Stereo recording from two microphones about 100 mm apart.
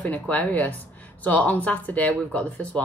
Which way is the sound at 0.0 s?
15° left (ahead or behind).